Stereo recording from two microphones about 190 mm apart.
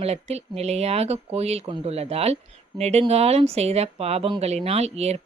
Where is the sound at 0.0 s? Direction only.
35° right (ahead or behind).